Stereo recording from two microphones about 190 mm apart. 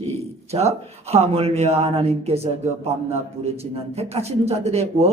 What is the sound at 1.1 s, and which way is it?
A woman's voice, 35° right (ahead or behind).